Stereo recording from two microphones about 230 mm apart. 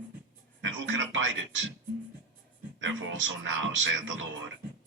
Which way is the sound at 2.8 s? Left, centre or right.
Right.